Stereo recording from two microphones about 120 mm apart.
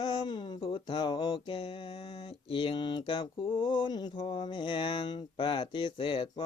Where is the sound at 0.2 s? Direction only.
40° left (ahead or behind).